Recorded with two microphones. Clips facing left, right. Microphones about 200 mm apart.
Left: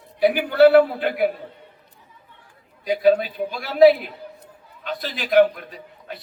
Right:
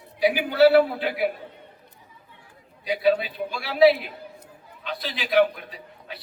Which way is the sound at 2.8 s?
45° left (ahead or behind).